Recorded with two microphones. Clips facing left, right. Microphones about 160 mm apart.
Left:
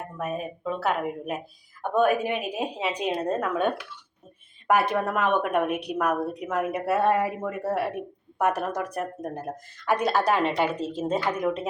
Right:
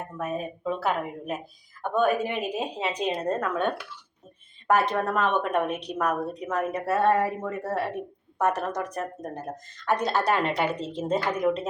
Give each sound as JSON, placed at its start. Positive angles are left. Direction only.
{"t": 0.2, "sound": "a woman's voice", "side_deg": 5}